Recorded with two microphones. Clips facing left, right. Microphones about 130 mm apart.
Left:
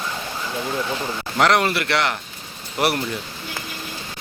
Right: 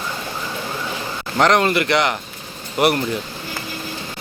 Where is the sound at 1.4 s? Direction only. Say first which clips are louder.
Right 3 dB; 5° left (ahead or behind).